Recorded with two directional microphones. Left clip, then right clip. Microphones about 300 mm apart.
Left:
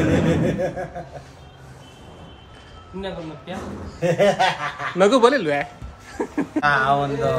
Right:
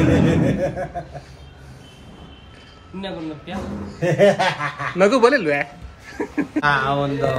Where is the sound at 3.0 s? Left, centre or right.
Centre.